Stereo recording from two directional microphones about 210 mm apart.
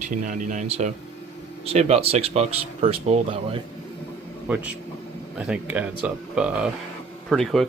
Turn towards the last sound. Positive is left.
turn(degrees=0)  # may be behind; listen again after turning